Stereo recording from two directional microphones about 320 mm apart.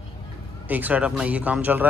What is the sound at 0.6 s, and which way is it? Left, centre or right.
Speech, centre.